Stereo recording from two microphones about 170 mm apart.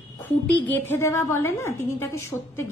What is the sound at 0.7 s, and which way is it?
A woman's voice, 15° left (ahead or behind).